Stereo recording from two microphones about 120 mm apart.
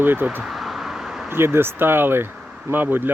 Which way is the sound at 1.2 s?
20° right (ahead or behind).